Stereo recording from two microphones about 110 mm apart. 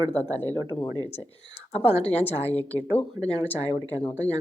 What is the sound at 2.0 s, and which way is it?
A woman's voice, 15° left (ahead or behind).